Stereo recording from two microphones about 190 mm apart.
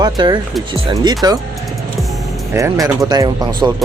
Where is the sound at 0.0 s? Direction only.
25° right (ahead or behind).